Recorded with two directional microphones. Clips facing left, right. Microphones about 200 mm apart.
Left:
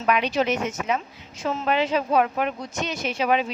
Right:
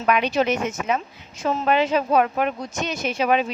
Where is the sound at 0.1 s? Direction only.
50° right (ahead or behind).